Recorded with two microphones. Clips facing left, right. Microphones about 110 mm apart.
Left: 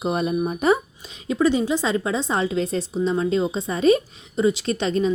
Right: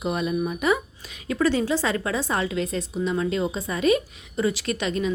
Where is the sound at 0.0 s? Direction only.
35° left (ahead or behind).